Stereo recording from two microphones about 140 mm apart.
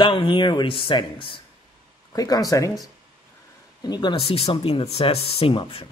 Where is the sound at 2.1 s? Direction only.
25° left (ahead or behind).